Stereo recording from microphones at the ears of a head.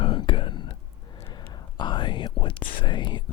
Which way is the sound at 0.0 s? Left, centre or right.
Left.